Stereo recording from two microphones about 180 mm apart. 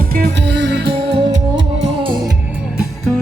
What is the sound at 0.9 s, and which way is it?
Music, 30° right (ahead or behind).